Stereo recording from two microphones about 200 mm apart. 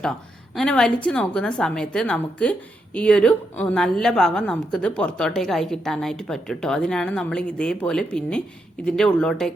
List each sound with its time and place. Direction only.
0.5 s a woman's voice: 5° left (ahead or behind)